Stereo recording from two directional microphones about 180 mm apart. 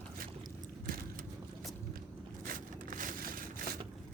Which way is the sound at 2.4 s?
50° right (ahead or behind).